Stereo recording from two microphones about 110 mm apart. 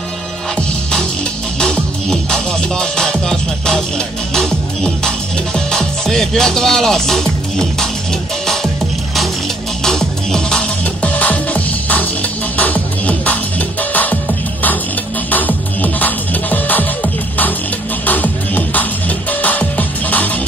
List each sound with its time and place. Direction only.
1.6 s music: 5° left (ahead or behind)
9.8 s music: 5° left (ahead or behind)
15.3 s music: 15° left (ahead or behind)